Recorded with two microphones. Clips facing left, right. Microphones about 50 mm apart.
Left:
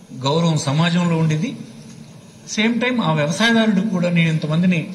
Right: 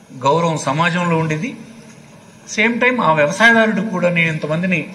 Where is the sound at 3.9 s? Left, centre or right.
Right.